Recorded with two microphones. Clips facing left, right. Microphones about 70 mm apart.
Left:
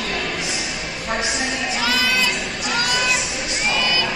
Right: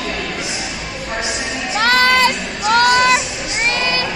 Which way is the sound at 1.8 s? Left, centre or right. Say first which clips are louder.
Right 9 dB; right.